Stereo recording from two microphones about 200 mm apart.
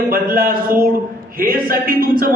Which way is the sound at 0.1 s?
45° right (ahead or behind).